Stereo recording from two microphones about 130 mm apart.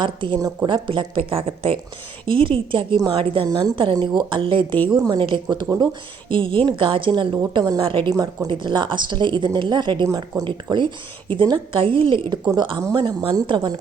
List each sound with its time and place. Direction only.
0.0 s speech: 40° right (ahead or behind)
0.3 s speech: 25° right (ahead or behind)
0.7 s speech: 40° right (ahead or behind)
8.1 s speech: 30° right (ahead or behind)